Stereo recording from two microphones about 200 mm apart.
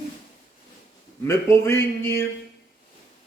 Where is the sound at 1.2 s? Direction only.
15° left (ahead or behind).